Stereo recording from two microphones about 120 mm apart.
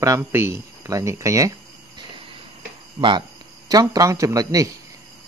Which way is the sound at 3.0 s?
30° right (ahead or behind).